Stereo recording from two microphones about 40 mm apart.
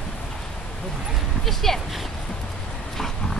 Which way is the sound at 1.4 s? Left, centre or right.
Centre.